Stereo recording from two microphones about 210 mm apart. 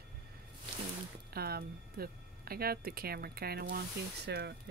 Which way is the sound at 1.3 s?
45° right (ahead or behind).